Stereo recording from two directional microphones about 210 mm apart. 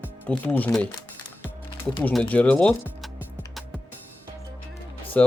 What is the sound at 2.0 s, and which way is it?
Speech, 5° left (ahead or behind).